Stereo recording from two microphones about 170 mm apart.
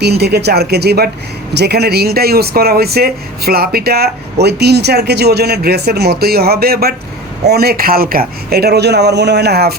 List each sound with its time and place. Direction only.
0.0 s speech: 75° right (ahead or behind)